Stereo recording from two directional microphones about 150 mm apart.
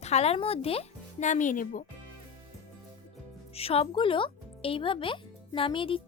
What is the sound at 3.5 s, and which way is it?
Speech, 40° left (ahead or behind).